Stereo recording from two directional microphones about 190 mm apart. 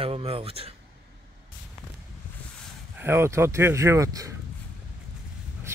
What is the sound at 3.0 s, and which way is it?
Speech, 10° right (ahead or behind).